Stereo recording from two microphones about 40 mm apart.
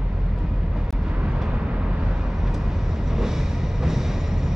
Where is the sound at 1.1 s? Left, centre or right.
Right; by 4.5 s centre.